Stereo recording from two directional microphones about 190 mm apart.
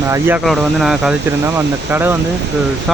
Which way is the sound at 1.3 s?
15° right (ahead or behind).